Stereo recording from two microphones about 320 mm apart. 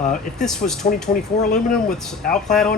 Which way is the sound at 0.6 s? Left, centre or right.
Left.